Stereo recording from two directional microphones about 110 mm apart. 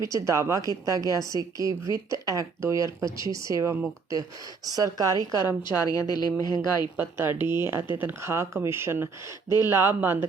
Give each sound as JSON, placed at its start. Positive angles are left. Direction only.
{"t": 0.0, "sound": "a woman's voice", "side_deg": -30}
{"t": 5.3, "sound": "a woman's voice", "side_deg": 40}
{"t": 6.9, "sound": "a woman's voice", "side_deg": -20}